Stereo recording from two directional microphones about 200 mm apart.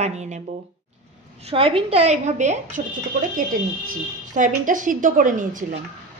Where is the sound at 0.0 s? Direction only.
35° right (ahead or behind).